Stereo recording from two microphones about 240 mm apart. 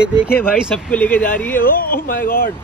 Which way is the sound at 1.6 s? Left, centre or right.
Left.